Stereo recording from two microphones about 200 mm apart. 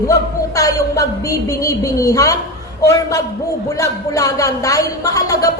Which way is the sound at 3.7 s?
15° left (ahead or behind).